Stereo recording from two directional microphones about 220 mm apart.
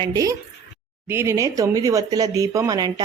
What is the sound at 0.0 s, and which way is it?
A woman's voice, 15° right (ahead or behind).